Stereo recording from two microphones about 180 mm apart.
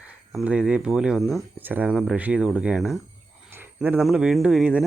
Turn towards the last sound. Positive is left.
turn(degrees=-5)  # may be behind; listen again after turning